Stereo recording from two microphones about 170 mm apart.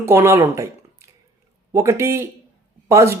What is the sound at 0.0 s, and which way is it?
Speech, 15° right (ahead or behind).